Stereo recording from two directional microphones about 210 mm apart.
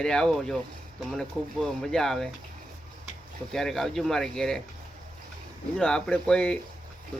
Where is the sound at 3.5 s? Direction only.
Centre (ahead or behind).